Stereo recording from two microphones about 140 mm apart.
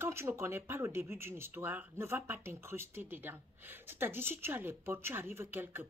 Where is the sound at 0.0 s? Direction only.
15° right (ahead or behind).